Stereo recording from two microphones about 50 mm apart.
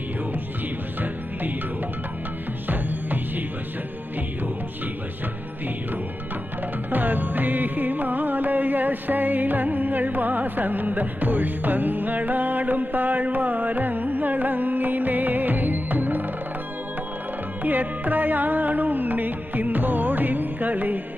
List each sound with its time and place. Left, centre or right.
2.7 s music: right
6.9 s music: right
17.6 s music: right